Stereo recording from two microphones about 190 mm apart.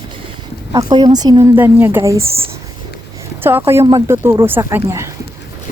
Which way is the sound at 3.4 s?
10° right (ahead or behind).